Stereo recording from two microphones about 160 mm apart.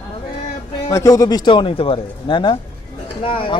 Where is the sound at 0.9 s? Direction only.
20° left (ahead or behind).